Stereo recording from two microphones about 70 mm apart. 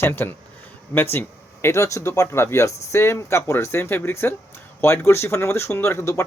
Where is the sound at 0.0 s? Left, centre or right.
Left.